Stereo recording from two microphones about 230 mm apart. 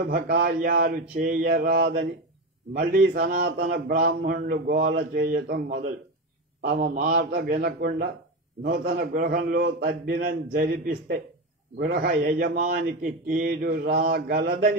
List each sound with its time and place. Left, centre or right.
0.0 s a man's voice: right